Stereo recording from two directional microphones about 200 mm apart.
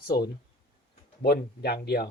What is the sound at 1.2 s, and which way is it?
Speech, 55° left (ahead or behind).